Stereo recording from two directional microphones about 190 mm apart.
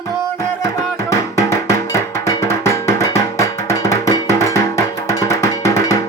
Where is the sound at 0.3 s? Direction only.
15° left (ahead or behind).